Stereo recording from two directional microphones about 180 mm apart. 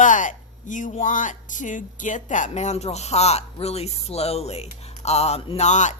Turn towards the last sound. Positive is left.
turn(degrees=40)  # may be behind; listen again after turning